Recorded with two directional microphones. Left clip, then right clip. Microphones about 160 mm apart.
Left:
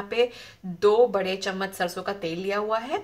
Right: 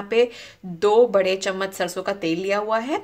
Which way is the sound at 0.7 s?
40° right (ahead or behind).